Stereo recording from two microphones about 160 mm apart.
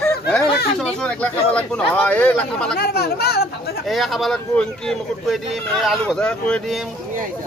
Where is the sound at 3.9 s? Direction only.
Centre (ahead or behind).